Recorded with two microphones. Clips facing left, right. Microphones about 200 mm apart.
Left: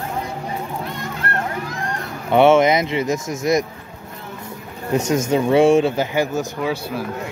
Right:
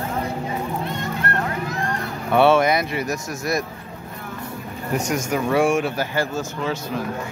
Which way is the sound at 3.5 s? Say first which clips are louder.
Left 6 dB; 20° left (ahead or behind).